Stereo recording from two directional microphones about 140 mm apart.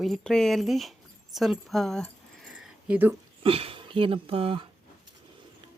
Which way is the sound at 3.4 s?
40° right (ahead or behind).